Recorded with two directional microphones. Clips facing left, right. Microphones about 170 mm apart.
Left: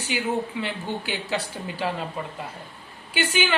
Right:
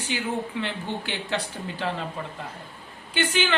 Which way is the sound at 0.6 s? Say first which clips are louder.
Left 1 dB; 5° left (ahead or behind).